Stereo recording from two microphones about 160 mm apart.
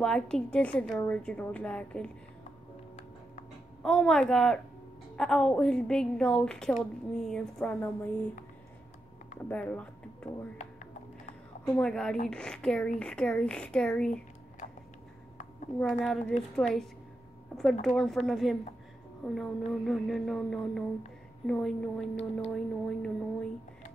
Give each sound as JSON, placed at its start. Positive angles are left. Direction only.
{"t": 0.0, "sound": "a woman's voice", "side_deg": 5}
{"t": 3.8, "sound": "a woman's voice", "side_deg": 5}
{"t": 9.5, "sound": "speech", "side_deg": 10}
{"t": 10.6, "sound": "music", "side_deg": 45}
{"t": 11.7, "sound": "a woman's voice", "side_deg": 5}
{"t": 16.1, "sound": "a woman's voice", "side_deg": 0}
{"t": 17.8, "sound": "a woman's voice", "side_deg": 0}